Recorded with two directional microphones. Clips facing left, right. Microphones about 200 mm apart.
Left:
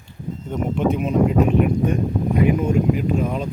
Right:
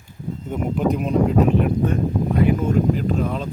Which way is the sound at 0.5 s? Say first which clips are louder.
Left 1 dB; centre (ahead or behind).